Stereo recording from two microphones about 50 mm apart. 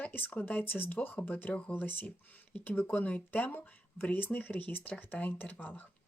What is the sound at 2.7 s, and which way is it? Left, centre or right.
Speech, left.